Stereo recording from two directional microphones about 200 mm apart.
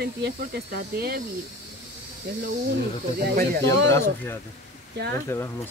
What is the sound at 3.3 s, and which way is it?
Speech, 50° right (ahead or behind).